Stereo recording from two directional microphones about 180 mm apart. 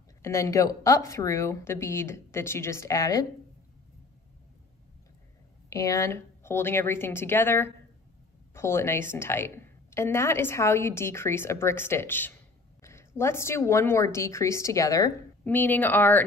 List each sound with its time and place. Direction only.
0.2 s a woman's voice: 15° left (ahead or behind)
5.7 s a woman's voice: 20° left (ahead or behind)